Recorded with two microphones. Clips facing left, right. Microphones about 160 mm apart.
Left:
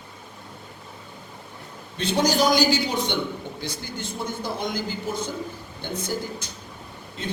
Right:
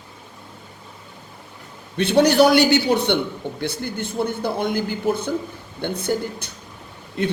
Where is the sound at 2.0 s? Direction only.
65° right (ahead or behind).